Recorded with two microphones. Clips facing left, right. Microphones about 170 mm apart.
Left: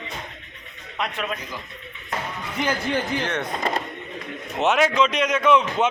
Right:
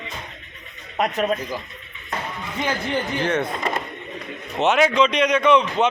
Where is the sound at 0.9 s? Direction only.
45° right (ahead or behind).